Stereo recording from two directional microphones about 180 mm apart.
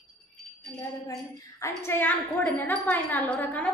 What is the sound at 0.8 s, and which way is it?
Speech, 20° left (ahead or behind).